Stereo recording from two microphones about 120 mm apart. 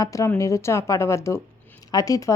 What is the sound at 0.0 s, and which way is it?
A woman's voice, 25° left (ahead or behind).